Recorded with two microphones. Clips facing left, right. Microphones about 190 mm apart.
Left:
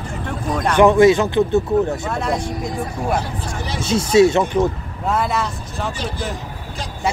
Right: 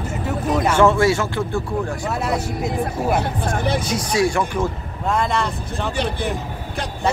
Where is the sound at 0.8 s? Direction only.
20° left (ahead or behind).